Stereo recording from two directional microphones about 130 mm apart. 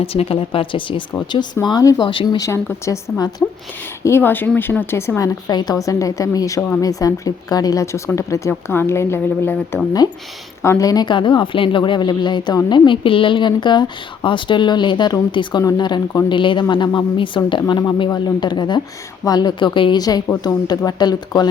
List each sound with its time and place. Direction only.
0.0 s speech: 45° left (ahead or behind)
1.6 s a woman's voice: 30° left (ahead or behind)
2.5 s speech: 20° left (ahead or behind)
10.6 s a woman's voice: 25° left (ahead or behind)